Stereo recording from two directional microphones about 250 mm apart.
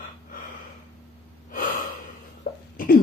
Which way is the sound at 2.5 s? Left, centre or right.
Left.